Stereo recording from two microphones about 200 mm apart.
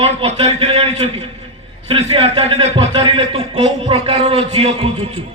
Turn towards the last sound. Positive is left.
turn(degrees=-30)  # may be behind; listen again after turning